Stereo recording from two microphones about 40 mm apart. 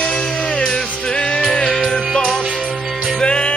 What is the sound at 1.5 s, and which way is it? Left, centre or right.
Music, centre.